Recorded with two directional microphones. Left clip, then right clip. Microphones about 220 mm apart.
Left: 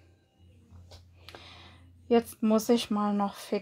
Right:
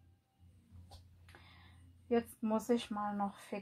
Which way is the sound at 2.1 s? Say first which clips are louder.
Left 10 dB; 40° left (ahead or behind).